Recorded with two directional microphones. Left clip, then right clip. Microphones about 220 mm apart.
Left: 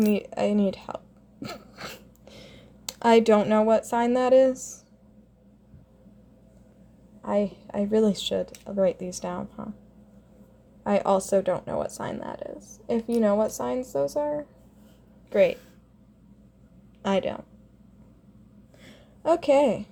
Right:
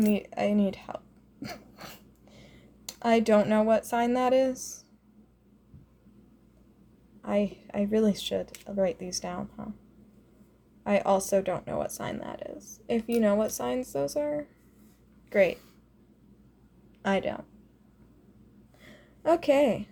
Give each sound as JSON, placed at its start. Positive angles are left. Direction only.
{"t": 0.0, "sound": "speech", "side_deg": 15}
{"t": 1.7, "sound": "a sound", "side_deg": 30}
{"t": 7.2, "sound": "speech", "side_deg": 5}
{"t": 10.8, "sound": "a woman's voice", "side_deg": 10}
{"t": 17.0, "sound": "speech", "side_deg": 10}
{"t": 18.8, "sound": "a sound", "side_deg": 5}